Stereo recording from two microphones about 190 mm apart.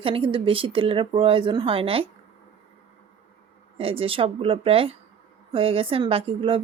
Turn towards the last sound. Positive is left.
turn(degrees=-30)  # may be behind; listen again after turning